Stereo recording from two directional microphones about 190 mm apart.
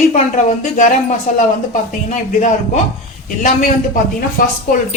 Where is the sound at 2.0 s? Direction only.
40° left (ahead or behind).